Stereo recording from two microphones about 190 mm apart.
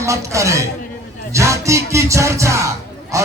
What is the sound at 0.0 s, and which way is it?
Music, 15° right (ahead or behind).